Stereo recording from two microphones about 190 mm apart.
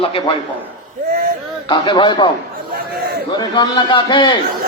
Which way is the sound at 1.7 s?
25° left (ahead or behind).